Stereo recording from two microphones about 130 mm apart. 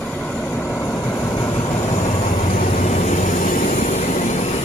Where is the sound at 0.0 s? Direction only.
10° left (ahead or behind).